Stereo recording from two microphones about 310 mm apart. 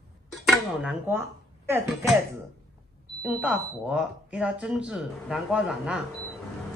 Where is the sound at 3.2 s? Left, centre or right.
Centre.